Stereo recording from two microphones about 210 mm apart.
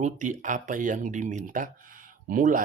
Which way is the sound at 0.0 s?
35° right (ahead or behind).